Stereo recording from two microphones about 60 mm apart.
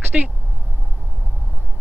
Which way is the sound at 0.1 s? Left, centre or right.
Centre.